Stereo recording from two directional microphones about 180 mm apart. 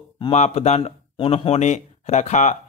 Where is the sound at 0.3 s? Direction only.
35° left (ahead or behind).